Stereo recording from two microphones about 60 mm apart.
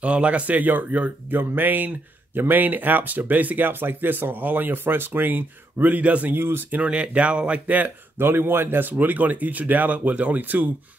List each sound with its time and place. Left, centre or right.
0.0 s speech: right
6.3 s speech: right
6.8 s speech: right
8.3 s speech: right